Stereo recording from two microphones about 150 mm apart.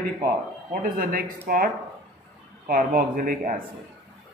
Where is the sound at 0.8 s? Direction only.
70° right (ahead or behind).